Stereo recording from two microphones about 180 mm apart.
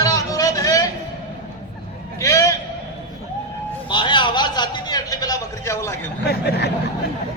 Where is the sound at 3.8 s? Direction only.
25° left (ahead or behind).